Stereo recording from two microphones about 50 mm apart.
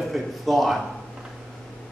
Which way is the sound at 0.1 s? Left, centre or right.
Centre.